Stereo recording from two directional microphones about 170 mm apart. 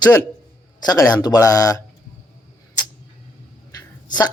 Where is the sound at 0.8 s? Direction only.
20° left (ahead or behind).